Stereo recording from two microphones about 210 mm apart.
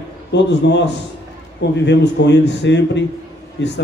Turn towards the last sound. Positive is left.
turn(degrees=55)  # may be behind; listen again after turning